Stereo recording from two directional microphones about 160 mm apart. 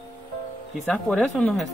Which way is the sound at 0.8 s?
5° left (ahead or behind).